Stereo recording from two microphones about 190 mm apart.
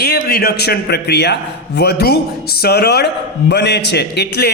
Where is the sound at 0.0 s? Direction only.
55° left (ahead or behind).